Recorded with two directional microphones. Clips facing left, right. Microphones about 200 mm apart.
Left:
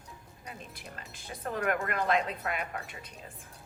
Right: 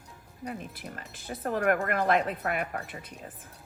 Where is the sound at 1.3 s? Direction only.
50° right (ahead or behind).